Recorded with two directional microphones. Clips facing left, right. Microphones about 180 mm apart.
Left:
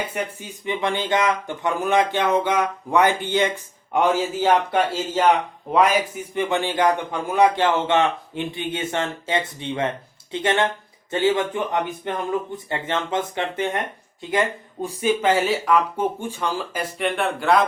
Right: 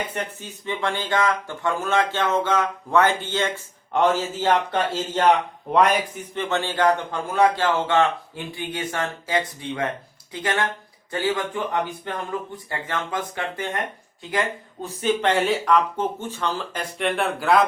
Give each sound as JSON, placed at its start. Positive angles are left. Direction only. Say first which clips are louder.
{"t": 0.0, "sound": "speech", "louder": "left 2 dB", "side_deg": 10}
{"t": 14.3, "sound": "speech", "louder": "left 3 dB", "side_deg": 10}